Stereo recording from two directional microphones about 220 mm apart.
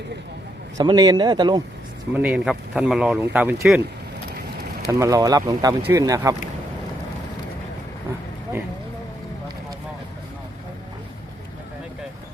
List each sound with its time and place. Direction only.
0.8 s speech: 15° right (ahead or behind)
2.1 s speech: 5° right (ahead or behind)
4.9 s speech: 15° right (ahead or behind)